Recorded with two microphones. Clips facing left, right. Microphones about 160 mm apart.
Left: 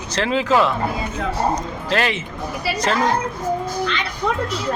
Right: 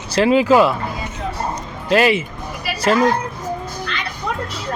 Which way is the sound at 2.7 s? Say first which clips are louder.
Right 5 dB; 10° right (ahead or behind).